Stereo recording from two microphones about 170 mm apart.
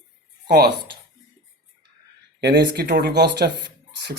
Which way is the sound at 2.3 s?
75° right (ahead or behind).